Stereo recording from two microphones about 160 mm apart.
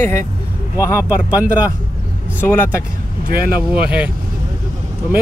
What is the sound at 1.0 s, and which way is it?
Speech, 10° right (ahead or behind).